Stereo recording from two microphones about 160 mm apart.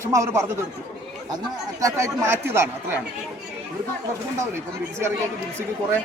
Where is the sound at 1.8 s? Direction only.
20° right (ahead or behind).